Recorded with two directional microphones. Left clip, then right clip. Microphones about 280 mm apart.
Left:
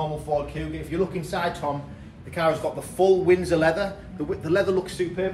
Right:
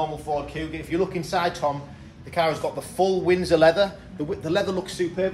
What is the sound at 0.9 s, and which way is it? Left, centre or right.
Speech, right.